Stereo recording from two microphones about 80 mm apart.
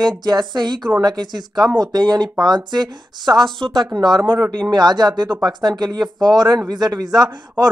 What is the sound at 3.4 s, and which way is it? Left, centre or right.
Speech, centre.